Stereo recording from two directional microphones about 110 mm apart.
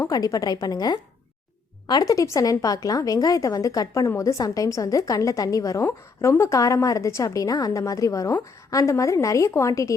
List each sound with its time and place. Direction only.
0.1 s a woman's voice: 35° left (ahead or behind)